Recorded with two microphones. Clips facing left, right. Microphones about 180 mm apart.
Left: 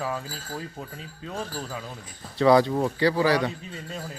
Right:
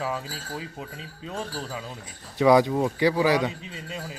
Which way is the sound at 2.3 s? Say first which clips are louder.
Even; 15° right (ahead or behind).